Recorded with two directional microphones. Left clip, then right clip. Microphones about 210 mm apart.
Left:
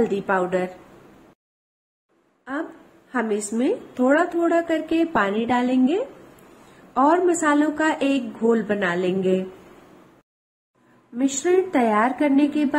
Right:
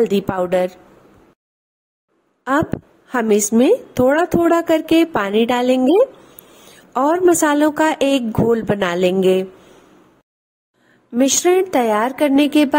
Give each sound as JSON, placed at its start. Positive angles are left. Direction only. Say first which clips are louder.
{"t": 0.0, "sound": "a woman's voice", "louder": "right 4 dB", "side_deg": -55}
{"t": 3.1, "sound": "a woman's voice", "louder": "right 8 dB", "side_deg": -55}
{"t": 6.9, "sound": "a woman's voice", "louder": "right 4 dB", "side_deg": -55}
{"t": 11.1, "sound": "a woman's voice", "louder": "right 6 dB", "side_deg": -55}